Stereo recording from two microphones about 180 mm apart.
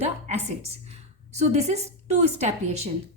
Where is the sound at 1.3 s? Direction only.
40° right (ahead or behind).